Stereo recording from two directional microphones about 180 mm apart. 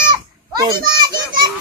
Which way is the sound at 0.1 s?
25° right (ahead or behind).